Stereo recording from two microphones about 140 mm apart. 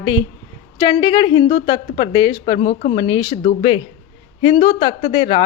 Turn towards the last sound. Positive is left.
turn(degrees=40)  # may be behind; listen again after turning